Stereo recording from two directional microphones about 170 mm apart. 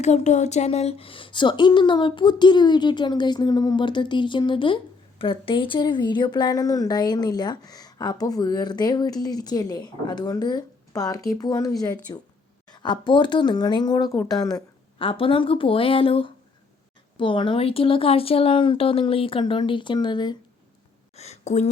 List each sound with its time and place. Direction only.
0.0 s speech: 45° left (ahead or behind); by 20.3 s 25° left (ahead or behind)
21.2 s speech: 40° left (ahead or behind)